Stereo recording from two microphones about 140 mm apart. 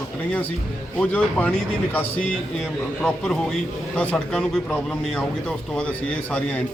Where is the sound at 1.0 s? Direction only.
10° left (ahead or behind).